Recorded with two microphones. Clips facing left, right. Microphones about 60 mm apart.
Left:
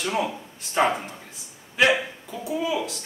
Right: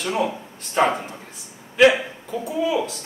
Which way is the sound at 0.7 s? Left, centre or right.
Centre.